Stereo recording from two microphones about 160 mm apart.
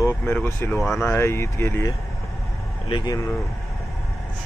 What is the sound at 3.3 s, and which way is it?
Vehicle, centre (ahead or behind).